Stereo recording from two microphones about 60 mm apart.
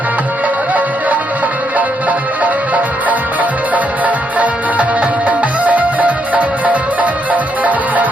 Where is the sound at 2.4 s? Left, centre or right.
Right.